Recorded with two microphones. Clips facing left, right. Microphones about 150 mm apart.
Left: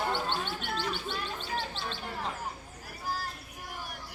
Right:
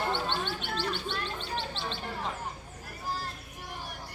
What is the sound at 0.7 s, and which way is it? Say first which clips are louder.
Speech: even; 5° left (ahead or behind).